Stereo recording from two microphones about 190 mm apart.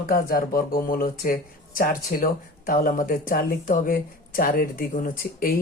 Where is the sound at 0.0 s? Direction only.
50° left (ahead or behind).